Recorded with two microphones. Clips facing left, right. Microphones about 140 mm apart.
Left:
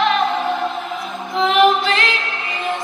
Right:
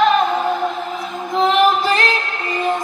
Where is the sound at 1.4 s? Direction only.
40° right (ahead or behind).